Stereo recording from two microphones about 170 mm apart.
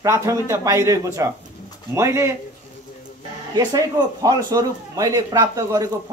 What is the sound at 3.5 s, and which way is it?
A man's voice, 20° right (ahead or behind).